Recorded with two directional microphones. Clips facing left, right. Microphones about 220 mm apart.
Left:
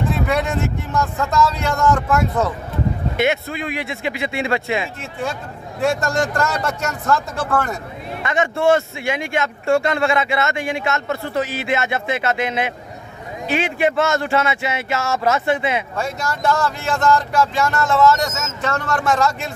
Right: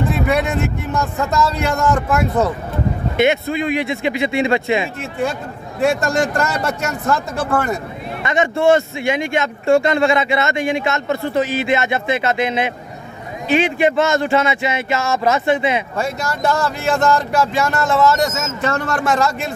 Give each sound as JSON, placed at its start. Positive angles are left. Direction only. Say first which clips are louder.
{"t": 0.3, "sound": "speech", "louder": "right 2 dB", "side_deg": -5}
{"t": 3.2, "sound": "speech", "louder": "right 5 dB", "side_deg": 5}
{"t": 5.8, "sound": "speech", "louder": "right 3 dB", "side_deg": -15}
{"t": 6.1, "sound": "speech", "louder": "right 2 dB", "side_deg": -5}
{"t": 6.9, "sound": "speech", "louder": "right 1 dB", "side_deg": -15}
{"t": 8.2, "sound": "speech", "louder": "right 2 dB", "side_deg": 5}